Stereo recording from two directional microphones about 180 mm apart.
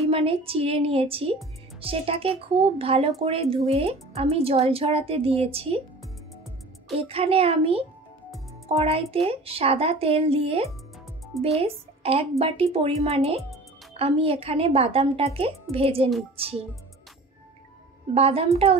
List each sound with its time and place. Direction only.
0.1 s speech: 30° right (ahead or behind)
7.0 s a child's voice: 30° right (ahead or behind)
18.1 s speech: 30° right (ahead or behind)